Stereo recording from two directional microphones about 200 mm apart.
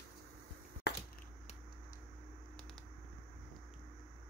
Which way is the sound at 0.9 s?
55° left (ahead or behind).